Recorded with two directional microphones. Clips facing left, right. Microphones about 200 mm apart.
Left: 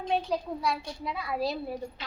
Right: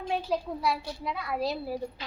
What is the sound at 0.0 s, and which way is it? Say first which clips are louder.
A woman's voice: left 1 dB; 5° right (ahead or behind).